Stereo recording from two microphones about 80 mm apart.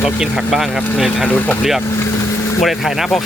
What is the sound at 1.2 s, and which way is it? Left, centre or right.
Speech, left.